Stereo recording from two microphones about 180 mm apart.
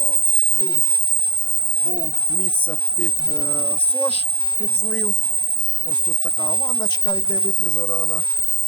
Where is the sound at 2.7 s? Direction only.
10° left (ahead or behind).